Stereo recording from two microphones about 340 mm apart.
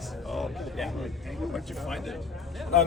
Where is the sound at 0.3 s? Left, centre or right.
Centre.